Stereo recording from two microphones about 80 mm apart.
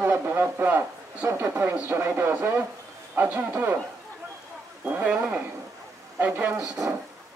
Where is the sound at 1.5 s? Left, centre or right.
Right.